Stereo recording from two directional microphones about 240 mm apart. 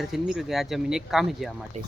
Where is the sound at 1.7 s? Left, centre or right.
Right.